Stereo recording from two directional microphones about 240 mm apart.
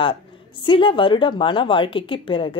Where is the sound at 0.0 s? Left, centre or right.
Left.